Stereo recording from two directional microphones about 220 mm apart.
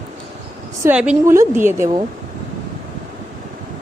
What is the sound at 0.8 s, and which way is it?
A woman's voice, 5° right (ahead or behind).